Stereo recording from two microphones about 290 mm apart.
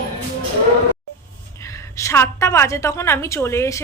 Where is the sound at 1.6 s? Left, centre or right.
Centre.